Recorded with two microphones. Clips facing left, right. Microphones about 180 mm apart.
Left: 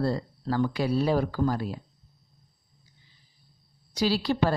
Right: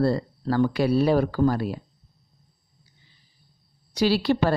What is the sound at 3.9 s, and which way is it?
Speech, 65° right (ahead or behind).